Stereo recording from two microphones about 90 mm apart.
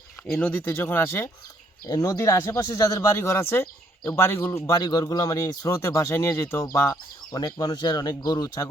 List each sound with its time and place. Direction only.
0.2 s a sound: 35° left (ahead or behind)
0.5 s speech: 25° left (ahead or behind)
2.0 s speech: 40° left (ahead or behind)
4.8 s speech: 45° left (ahead or behind)
7.3 s speech: 45° left (ahead or behind)